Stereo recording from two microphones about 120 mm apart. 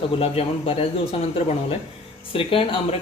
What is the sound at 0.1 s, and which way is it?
Speech, 55° left (ahead or behind).